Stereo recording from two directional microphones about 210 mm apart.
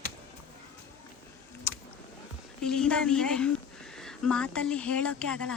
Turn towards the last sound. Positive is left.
turn(degrees=5)  # may be behind; listen again after turning